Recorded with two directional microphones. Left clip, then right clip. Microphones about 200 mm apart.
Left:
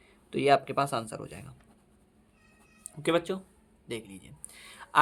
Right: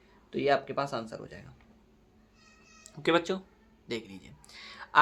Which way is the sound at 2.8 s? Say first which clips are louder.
Right 1 dB; 20° left (ahead or behind).